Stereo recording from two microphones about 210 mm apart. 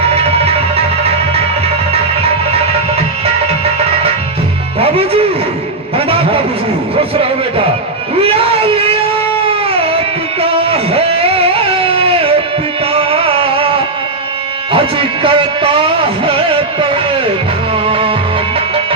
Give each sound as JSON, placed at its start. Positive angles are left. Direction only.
{"t": 0.1, "sound": "music", "side_deg": -30}
{"t": 6.1, "sound": "a sound", "side_deg": -25}
{"t": 9.6, "sound": "music", "side_deg": -25}
{"t": 10.4, "sound": "a sound", "side_deg": -25}
{"t": 12.9, "sound": "music", "side_deg": -25}
{"t": 17.8, "sound": "music", "side_deg": -25}